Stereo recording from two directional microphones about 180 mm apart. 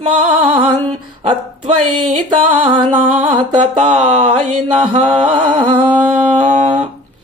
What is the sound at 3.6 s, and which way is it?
Speech, 40° right (ahead or behind).